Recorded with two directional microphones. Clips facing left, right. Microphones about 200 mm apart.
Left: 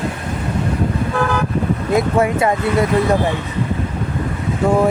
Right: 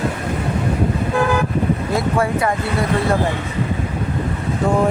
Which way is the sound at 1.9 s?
20° left (ahead or behind).